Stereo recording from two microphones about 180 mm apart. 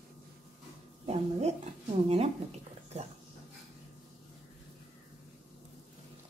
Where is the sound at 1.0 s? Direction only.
35° right (ahead or behind).